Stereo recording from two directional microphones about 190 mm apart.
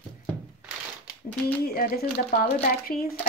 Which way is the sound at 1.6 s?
50° left (ahead or behind).